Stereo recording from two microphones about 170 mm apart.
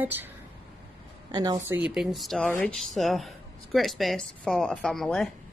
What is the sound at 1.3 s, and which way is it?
Speech, 25° right (ahead or behind).